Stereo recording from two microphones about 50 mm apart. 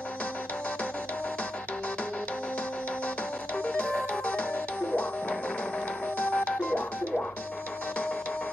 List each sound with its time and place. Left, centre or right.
3.5 s music: left
6.1 s music: left